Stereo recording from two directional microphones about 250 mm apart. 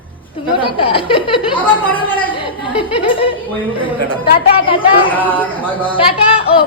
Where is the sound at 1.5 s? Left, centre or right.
Centre.